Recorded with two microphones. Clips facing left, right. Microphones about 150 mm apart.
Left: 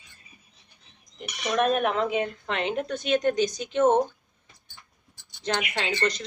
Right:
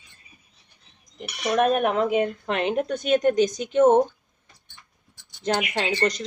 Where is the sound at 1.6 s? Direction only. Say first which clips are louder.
Right 3 dB; 10° right (ahead or behind).